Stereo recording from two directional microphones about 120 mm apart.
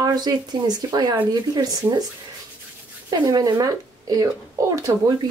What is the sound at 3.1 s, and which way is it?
Speech, 30° right (ahead or behind).